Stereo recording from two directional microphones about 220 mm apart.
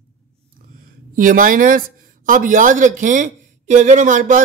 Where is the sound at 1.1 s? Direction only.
40° right (ahead or behind).